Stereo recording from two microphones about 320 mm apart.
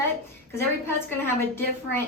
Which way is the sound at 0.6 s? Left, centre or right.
Centre.